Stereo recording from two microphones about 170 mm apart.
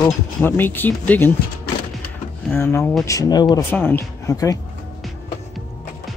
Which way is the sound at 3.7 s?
15° left (ahead or behind).